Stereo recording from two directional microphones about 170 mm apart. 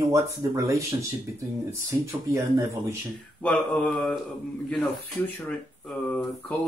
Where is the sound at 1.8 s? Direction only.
15° right (ahead or behind).